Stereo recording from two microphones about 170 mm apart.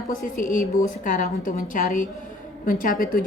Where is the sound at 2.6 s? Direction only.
55° left (ahead or behind).